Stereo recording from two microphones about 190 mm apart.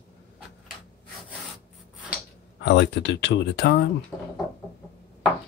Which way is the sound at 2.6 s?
65° left (ahead or behind).